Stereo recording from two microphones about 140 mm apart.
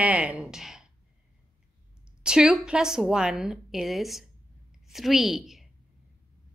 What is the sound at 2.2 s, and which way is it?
A woman's voice, 5° right (ahead or behind).